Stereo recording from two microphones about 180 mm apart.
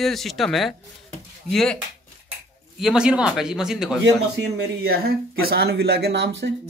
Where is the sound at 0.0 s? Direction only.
Centre (ahead or behind).